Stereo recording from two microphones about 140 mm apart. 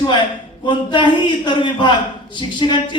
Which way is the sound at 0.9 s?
35° left (ahead or behind).